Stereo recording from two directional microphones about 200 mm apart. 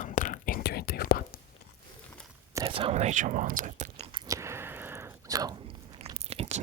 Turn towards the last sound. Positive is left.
turn(degrees=-30)  # may be behind; listen again after turning